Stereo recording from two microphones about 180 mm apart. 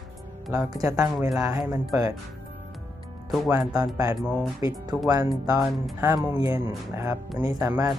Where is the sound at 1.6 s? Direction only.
Centre (ahead or behind).